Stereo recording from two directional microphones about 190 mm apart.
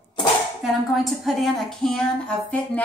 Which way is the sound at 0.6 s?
Centre (ahead or behind).